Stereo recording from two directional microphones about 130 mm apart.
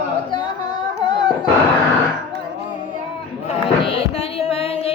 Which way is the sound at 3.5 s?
45° left (ahead or behind).